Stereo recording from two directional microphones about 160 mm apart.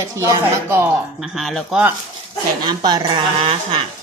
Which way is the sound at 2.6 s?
25° right (ahead or behind).